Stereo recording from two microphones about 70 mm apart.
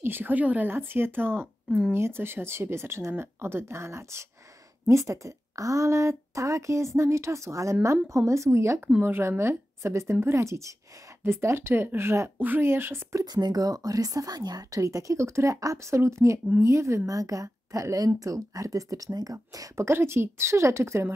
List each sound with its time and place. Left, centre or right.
0.0 s a woman's voice: right
0.7 s a woman's voice: right
9.0 s a woman's voice: right
13.2 s a woman's voice: right
14.8 s a woman's voice: right
19.9 s speech: right